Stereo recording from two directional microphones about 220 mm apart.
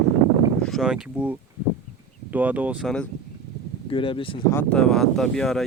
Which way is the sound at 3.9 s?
25° left (ahead or behind).